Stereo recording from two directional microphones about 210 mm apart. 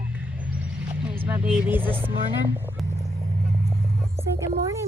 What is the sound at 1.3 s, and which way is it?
Speech, 5° right (ahead or behind).